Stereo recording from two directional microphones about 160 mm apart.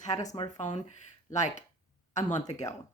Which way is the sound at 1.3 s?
50° left (ahead or behind).